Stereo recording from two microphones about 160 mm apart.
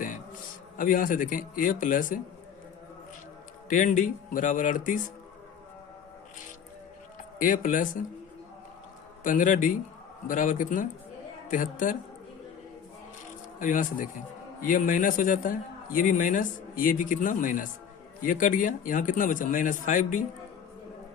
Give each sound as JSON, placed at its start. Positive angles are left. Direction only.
{"t": 0.8, "sound": "a man's voice", "side_deg": 55}
{"t": 3.7, "sound": "a man's voice", "side_deg": 55}
{"t": 7.3, "sound": "a man's voice", "side_deg": 55}
{"t": 9.2, "sound": "a man's voice", "side_deg": 55}
{"t": 13.6, "sound": "a man's voice", "side_deg": 55}